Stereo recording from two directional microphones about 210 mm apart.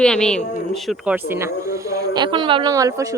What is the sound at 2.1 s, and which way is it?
Speech, 20° right (ahead or behind).